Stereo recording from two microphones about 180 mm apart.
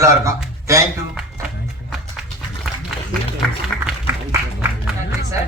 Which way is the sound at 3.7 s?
Centre (ahead or behind).